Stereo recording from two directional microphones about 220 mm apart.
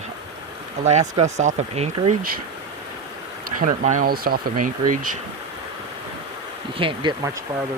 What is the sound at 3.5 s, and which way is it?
Speech, 35° right (ahead or behind).